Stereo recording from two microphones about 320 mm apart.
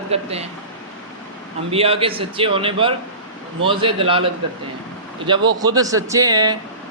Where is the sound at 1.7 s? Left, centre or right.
Centre.